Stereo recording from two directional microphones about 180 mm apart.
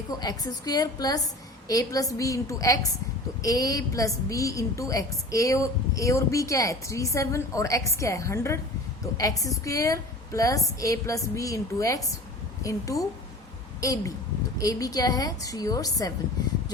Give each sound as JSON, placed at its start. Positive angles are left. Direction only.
{"t": 0.1, "sound": "a woman's voice", "side_deg": 20}